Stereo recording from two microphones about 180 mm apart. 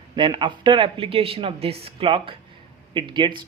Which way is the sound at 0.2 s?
25° right (ahead or behind).